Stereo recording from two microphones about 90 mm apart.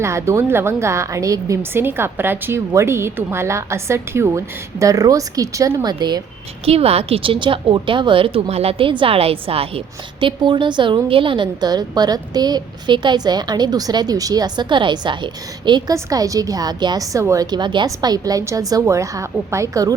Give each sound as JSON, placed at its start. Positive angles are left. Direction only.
{"t": 0.0, "sound": "a woman's voice", "side_deg": -30}
{"t": 1.7, "sound": "a woman's voice", "side_deg": -25}
{"t": 6.7, "sound": "speech", "side_deg": -90}
{"t": 15.9, "sound": "a woman's voice", "side_deg": -40}
{"t": 17.8, "sound": "a woman's voice", "side_deg": -45}